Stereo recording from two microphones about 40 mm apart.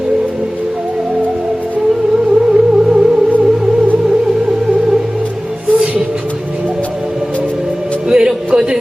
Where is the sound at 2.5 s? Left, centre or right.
Centre.